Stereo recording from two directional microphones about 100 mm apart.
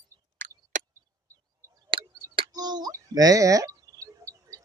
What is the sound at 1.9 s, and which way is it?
Tick, 55° right (ahead or behind).